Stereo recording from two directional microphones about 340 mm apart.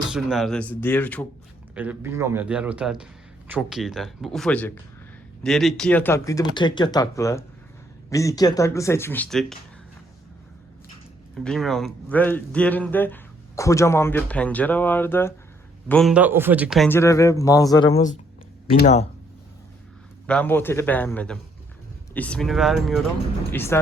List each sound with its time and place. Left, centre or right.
0.1 s speech: centre
11.3 s speech: centre
20.2 s speech: centre